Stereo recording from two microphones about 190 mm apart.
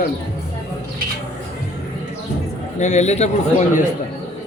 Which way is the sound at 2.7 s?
35° left (ahead or behind).